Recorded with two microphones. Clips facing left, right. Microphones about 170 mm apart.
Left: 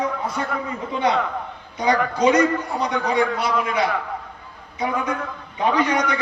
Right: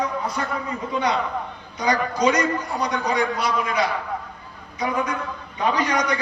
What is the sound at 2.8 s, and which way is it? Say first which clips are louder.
A man's voice: left 2 dB; 25° left (ahead or behind).